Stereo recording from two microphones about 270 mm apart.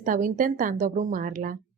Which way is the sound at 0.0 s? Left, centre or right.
Right.